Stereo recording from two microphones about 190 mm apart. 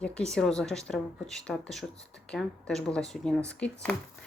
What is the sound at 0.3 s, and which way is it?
Speech, 5° left (ahead or behind).